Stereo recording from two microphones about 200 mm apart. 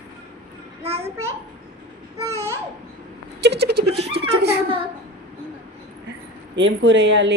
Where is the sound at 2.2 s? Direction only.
15° right (ahead or behind).